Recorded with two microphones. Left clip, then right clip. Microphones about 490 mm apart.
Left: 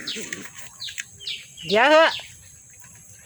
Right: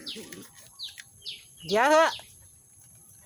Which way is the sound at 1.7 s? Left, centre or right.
Right.